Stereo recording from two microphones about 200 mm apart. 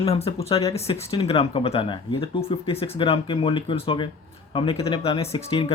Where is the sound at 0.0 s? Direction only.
30° left (ahead or behind).